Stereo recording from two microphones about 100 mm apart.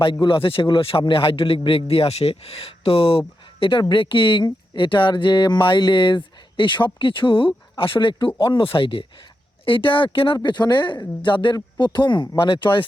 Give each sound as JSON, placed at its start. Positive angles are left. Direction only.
{"t": 0.0, "sound": "a man's voice", "side_deg": 60}